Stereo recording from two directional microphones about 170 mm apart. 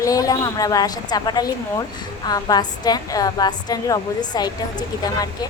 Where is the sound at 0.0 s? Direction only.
20° left (ahead or behind).